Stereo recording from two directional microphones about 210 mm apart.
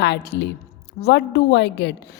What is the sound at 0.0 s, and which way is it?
A woman's voice, 55° left (ahead or behind).